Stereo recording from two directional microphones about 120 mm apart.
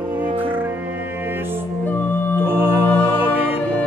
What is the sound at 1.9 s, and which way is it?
Music, 15° left (ahead or behind).